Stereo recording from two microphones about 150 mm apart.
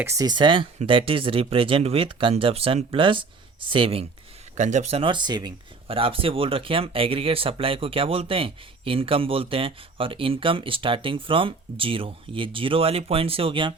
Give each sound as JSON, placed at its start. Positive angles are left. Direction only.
{"t": 0.0, "sound": "speech", "side_deg": -20}
{"t": 4.5, "sound": "speech", "side_deg": -55}